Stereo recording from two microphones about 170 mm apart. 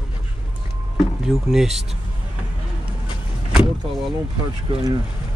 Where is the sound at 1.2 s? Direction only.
5° right (ahead or behind).